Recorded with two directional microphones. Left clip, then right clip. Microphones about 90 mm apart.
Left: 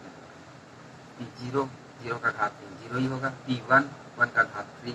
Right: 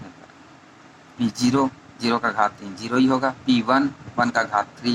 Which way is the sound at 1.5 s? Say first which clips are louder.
Right 7 dB; 30° right (ahead or behind).